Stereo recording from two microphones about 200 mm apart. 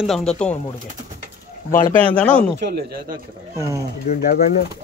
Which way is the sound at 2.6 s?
50° right (ahead or behind).